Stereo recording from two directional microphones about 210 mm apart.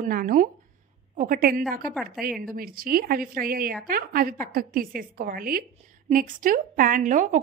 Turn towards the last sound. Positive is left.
turn(degrees=-35)  # may be behind; listen again after turning